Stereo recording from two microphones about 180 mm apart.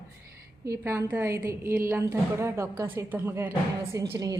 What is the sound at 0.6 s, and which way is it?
A woman's voice, 15° right (ahead or behind).